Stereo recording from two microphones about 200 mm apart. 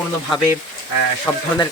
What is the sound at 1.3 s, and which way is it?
Speech, 15° left (ahead or behind).